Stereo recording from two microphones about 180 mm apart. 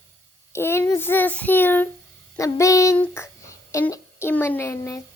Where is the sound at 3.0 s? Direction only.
15° left (ahead or behind).